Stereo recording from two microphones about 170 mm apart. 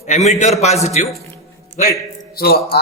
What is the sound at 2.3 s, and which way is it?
Speech, 65° left (ahead or behind).